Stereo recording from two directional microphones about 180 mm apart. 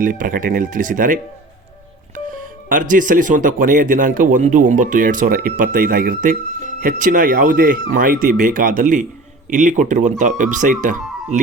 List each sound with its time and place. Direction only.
0.0 s speech: 50° right (ahead or behind)